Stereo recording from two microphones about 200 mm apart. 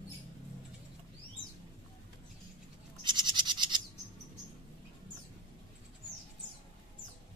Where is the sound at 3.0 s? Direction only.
20° right (ahead or behind).